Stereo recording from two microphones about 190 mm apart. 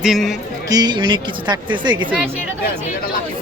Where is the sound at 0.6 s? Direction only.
20° right (ahead or behind).